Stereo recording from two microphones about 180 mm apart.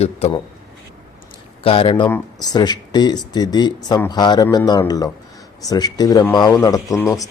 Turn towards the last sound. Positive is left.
turn(degrees=15)  # may be behind; listen again after turning